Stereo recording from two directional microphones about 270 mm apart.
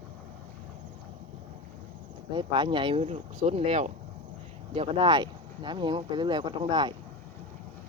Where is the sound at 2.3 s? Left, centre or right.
Centre.